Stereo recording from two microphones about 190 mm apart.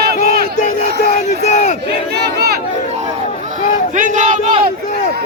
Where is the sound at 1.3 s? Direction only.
40° left (ahead or behind).